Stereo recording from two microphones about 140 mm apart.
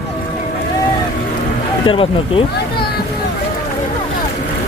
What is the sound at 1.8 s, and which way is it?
Speech, 40° left (ahead or behind).